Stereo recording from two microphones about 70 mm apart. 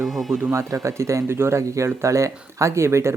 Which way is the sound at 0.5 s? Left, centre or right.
Right.